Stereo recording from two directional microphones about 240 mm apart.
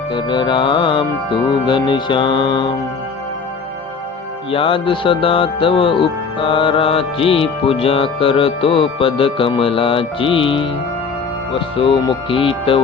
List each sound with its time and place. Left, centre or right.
0.1 s speech: centre
4.5 s speech: left